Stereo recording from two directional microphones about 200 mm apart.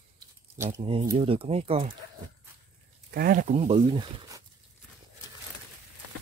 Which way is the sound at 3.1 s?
45° right (ahead or behind).